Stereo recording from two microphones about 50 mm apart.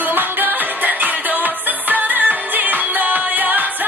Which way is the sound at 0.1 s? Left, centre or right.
Right.